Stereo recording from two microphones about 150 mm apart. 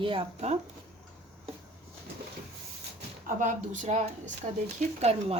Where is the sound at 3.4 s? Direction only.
60° right (ahead or behind).